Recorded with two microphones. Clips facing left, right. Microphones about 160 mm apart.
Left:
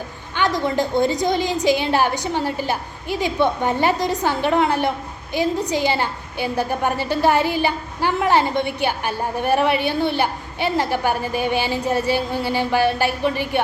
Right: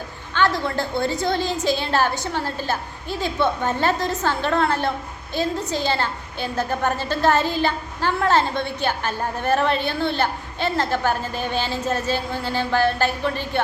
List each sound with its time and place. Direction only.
0.3 s a woman's voice: 15° left (ahead or behind)